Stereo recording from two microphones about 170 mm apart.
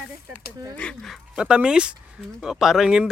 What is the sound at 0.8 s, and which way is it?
Dog, 5° left (ahead or behind).